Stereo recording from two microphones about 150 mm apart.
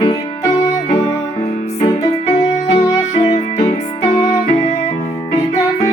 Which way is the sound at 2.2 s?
50° left (ahead or behind).